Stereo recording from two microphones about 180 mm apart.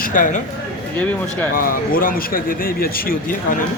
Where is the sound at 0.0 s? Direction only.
45° left (ahead or behind).